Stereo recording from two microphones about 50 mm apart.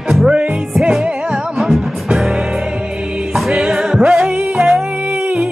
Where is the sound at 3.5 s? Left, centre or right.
Centre.